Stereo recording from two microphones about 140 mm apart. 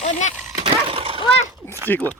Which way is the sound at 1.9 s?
15° left (ahead or behind).